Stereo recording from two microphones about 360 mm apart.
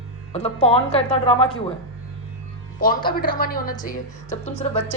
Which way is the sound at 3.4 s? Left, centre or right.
Left.